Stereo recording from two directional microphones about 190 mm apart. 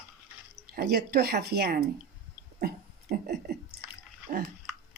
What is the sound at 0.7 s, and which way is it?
Speech, 55° right (ahead or behind).